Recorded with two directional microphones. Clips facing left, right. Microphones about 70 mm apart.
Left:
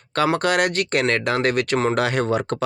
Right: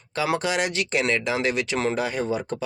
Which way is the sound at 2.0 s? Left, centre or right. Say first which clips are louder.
Left 5 dB; left.